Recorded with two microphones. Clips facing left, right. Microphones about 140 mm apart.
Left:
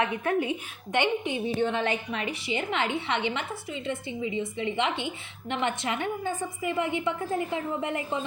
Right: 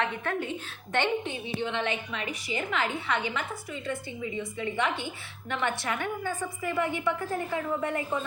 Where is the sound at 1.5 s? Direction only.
40° left (ahead or behind).